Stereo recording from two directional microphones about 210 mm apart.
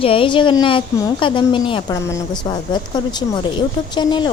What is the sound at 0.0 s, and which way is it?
Speech, 25° left (ahead or behind).